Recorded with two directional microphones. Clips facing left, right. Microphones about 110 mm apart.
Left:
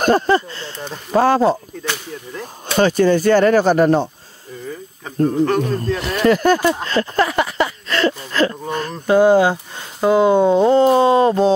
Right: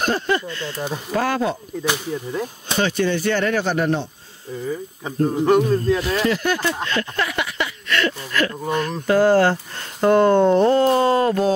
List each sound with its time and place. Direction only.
0.0 s speech: 45° left (ahead or behind)
0.5 s speech: 30° left (ahead or behind)
0.7 s speech: 10° right (ahead or behind)
1.1 s speech: 30° left (ahead or behind)
1.8 s speech: 15° right (ahead or behind)
2.8 s speech: 40° left (ahead or behind)
5.0 s speech: 15° right (ahead or behind)
6.2 s speech: 45° left (ahead or behind)
6.7 s a sound: 35° left (ahead or behind)
9.0 s speech: 20° left (ahead or behind)